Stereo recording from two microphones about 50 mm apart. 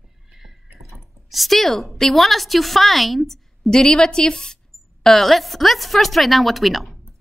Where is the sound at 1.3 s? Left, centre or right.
Centre.